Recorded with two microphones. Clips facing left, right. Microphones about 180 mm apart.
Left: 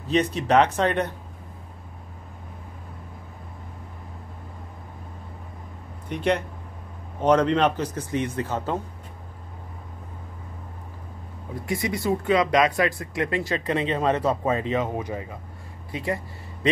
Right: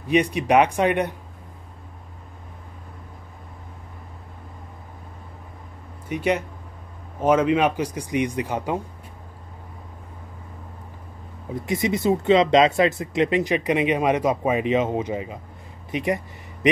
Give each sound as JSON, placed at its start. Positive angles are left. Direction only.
{"t": 0.1, "sound": "a man's voice", "side_deg": -15}
{"t": 6.0, "sound": "a man's voice", "side_deg": -5}
{"t": 11.6, "sound": "a man's voice", "side_deg": -20}